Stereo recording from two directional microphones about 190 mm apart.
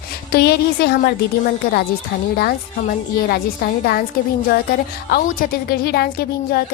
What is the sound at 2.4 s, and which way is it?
A woman's voice, 50° left (ahead or behind).